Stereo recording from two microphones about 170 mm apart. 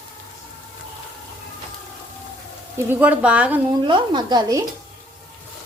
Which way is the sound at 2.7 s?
10° right (ahead or behind).